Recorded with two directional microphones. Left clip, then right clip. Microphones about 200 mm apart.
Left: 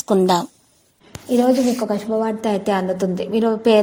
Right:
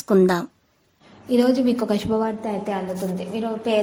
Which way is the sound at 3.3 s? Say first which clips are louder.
Left 9 dB; 45° left (ahead or behind).